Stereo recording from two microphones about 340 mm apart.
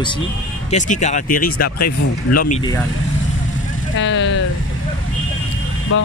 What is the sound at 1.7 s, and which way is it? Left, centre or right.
Speech, left.